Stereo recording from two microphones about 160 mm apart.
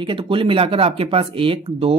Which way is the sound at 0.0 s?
30° right (ahead or behind).